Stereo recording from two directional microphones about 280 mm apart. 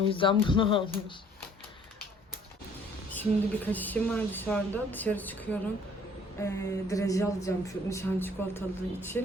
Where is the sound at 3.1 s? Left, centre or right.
Centre.